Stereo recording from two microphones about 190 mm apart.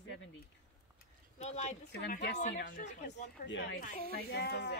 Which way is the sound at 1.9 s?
60° left (ahead or behind).